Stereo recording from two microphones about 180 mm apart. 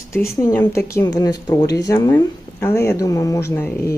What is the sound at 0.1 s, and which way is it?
Speech, 15° left (ahead or behind).